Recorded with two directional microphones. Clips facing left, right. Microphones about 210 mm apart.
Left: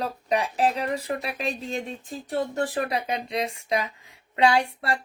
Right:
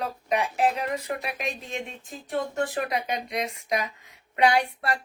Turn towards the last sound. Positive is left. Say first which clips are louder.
# left 1 dB
turn(degrees=25)  # may be behind; listen again after turning